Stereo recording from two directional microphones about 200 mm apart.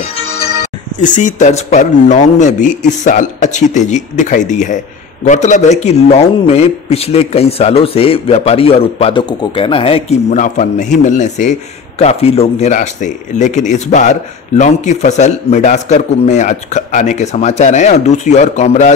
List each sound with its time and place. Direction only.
1.0 s speech: 40° left (ahead or behind)